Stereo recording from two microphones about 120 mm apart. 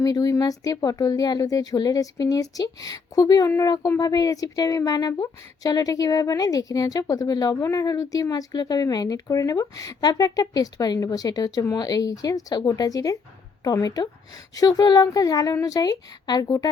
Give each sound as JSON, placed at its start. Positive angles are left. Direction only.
{"t": 0.0, "sound": "speech", "side_deg": 30}